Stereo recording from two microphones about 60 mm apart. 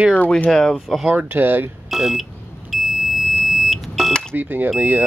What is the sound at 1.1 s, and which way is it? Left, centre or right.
Speech, right.